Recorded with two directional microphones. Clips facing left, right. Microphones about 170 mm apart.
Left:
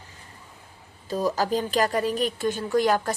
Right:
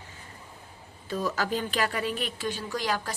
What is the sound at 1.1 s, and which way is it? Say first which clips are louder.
A woman's voice: left 5 dB; 35° left (ahead or behind).